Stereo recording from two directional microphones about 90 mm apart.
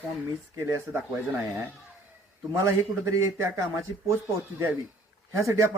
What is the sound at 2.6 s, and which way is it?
A man's voice, 35° right (ahead or behind).